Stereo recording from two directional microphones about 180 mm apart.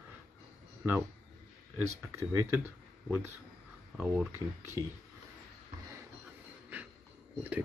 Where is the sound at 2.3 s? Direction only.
15° right (ahead or behind).